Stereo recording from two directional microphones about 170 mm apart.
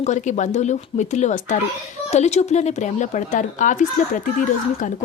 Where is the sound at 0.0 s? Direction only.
45° left (ahead or behind).